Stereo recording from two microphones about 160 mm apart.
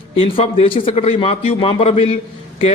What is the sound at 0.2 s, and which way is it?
A man's voice, 35° left (ahead or behind).